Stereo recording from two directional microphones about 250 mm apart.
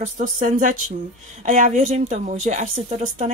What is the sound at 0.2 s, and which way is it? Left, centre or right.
Speech, right.